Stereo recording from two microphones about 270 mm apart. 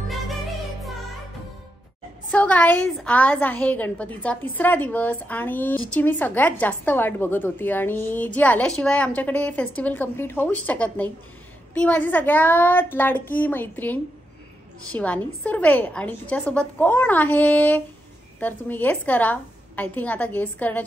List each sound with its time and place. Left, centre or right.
2.3 s a woman's voice: centre